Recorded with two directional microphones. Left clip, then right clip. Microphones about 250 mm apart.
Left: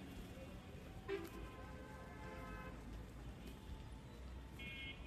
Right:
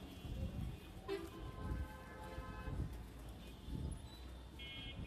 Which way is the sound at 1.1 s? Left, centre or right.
Right.